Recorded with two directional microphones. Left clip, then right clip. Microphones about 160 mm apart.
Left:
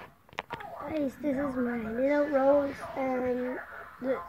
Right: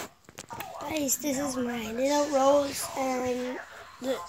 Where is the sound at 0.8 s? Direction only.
10° right (ahead or behind).